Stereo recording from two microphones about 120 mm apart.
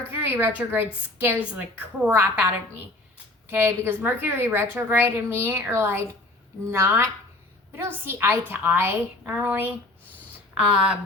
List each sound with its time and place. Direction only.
0.1 s a woman's voice: 15° right (ahead or behind)